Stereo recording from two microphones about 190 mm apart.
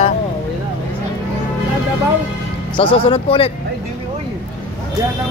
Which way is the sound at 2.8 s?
30° left (ahead or behind).